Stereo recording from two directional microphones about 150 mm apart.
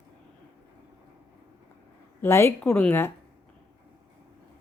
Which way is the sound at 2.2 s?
15° left (ahead or behind).